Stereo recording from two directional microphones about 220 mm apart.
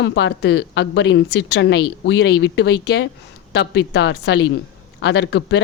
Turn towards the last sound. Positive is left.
turn(degrees=50)  # may be behind; listen again after turning